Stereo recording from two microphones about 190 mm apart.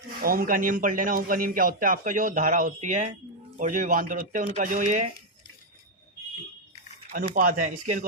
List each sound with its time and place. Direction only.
0.2 s a man's voice: 50° right (ahead or behind)
7.1 s a man's voice: 45° right (ahead or behind)